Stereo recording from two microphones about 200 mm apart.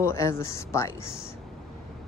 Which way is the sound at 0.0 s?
15° left (ahead or behind).